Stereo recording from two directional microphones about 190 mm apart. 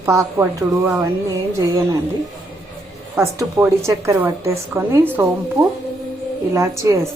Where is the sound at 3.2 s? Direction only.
15° right (ahead or behind).